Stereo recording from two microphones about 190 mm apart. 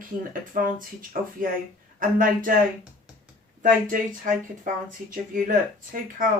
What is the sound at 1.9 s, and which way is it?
Speech, 45° right (ahead or behind).